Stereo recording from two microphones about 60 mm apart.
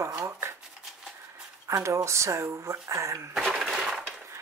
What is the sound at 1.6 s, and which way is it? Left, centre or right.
Speech, right.